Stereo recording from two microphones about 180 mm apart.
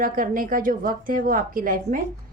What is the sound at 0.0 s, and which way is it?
A woman's voice, 50° right (ahead or behind).